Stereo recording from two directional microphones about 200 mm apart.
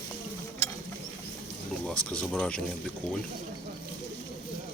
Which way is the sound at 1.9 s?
5° left (ahead or behind).